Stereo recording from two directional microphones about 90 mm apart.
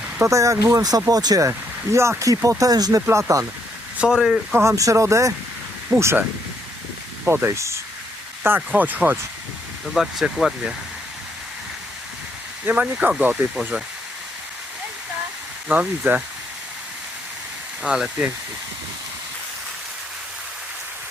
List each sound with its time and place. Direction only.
0.2 s speech: 35° right (ahead or behind)
1.5 s speech: 30° right (ahead or behind)
3.1 s speech: 35° right (ahead or behind)
3.9 s speech: 10° right (ahead or behind)
4.5 s speech: 35° right (ahead or behind)
5.9 s speech: 15° right (ahead or behind)
7.3 s speech: 25° right (ahead or behind)
8.4 s speech: 20° right (ahead or behind)
9.9 s speech: 5° right (ahead or behind)
12.6 s speech: 15° right (ahead or behind)
15.7 s speech: 15° right (ahead or behind)
17.8 s speech: 10° right (ahead or behind)